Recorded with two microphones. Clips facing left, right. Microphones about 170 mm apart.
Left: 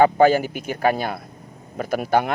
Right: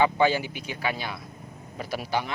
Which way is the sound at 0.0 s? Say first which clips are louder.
Left 7 dB; 50° left (ahead or behind).